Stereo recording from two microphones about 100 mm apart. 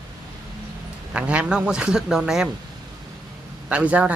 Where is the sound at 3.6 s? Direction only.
15° right (ahead or behind).